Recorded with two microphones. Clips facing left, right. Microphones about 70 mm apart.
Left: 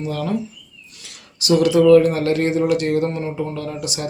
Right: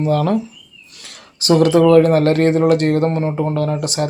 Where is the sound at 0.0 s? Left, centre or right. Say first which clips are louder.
Right 7 dB; right.